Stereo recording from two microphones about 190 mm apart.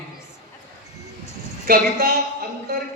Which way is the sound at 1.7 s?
50° right (ahead or behind).